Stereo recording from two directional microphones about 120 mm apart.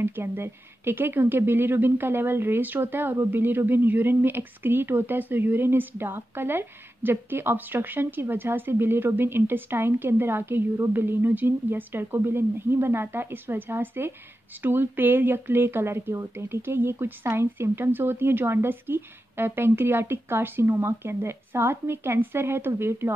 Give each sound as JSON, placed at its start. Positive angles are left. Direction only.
{"t": 0.0, "sound": "speech", "side_deg": -20}